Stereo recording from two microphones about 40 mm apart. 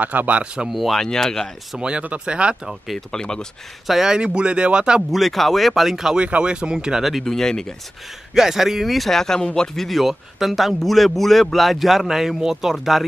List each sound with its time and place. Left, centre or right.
0.0 s speech: right
0.7 s a man's voice: centre
0.9 s speech: centre
1.8 s speech: right
3.1 s speech: centre
3.8 s a man's voice: centre
4.1 s speech: right
5.1 s a man's voice: centre
6.1 s speech: right
7.0 s a man's voice: centre
7.2 s speech: centre
8.4 s speech: centre
9.2 s speech: centre
9.8 s a man's voice: centre